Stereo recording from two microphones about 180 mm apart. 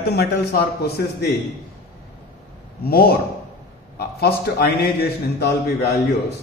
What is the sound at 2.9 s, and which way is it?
A man's voice, 55° left (ahead or behind).